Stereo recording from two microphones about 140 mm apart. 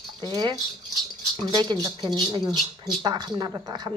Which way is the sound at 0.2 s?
30° right (ahead or behind).